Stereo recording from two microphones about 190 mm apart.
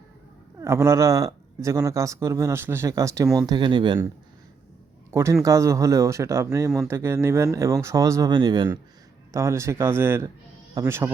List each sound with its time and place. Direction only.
0.6 s speech: 15° right (ahead or behind)
5.1 s speech: 15° right (ahead or behind)